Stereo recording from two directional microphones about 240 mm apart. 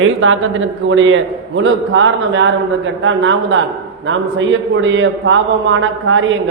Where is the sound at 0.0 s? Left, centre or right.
Right.